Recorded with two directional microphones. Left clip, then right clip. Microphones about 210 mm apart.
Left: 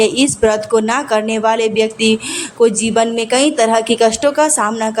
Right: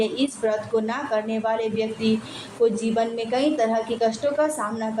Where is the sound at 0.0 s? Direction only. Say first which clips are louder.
Left 11 dB; 35° left (ahead or behind).